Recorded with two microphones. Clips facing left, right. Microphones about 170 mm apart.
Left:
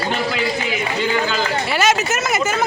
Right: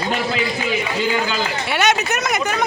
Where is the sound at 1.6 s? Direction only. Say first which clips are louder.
Right 1 dB; centre (ahead or behind).